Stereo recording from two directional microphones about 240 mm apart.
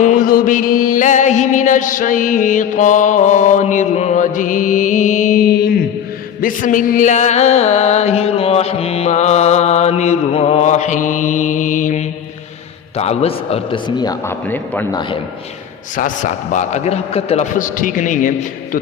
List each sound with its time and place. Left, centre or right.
0.0 s mantra: left
6.4 s music: left; by 14.8 s centre
16.0 s mantra: left